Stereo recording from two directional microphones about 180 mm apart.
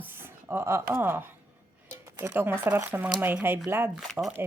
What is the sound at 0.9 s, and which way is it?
Speech, 15° right (ahead or behind).